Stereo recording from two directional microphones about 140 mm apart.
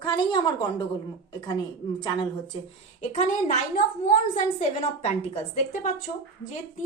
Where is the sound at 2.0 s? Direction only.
30° left (ahead or behind).